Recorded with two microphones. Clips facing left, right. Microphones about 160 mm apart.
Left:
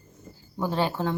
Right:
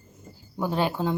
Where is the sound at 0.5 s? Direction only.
15° right (ahead or behind).